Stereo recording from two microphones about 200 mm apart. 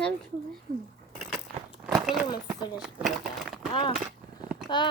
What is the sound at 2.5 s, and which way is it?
Speech, 20° left (ahead or behind).